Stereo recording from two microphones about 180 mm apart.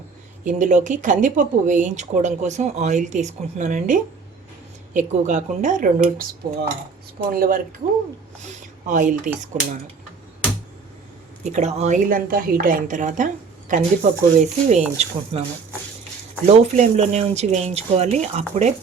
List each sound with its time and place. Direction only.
0.4 s speech: 45° right (ahead or behind)
7.3 s speech: 55° right (ahead or behind)
8.4 s speech: 40° right (ahead or behind)
11.4 s speech: 40° right (ahead or behind)
16.5 s speech: 40° right (ahead or behind)